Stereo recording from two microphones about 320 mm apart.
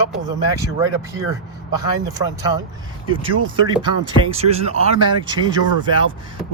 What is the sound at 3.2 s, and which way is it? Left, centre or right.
Speech, centre.